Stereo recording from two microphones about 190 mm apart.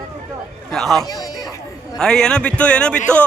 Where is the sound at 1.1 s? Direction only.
20° left (ahead or behind).